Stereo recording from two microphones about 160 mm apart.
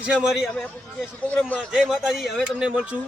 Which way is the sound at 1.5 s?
5° right (ahead or behind).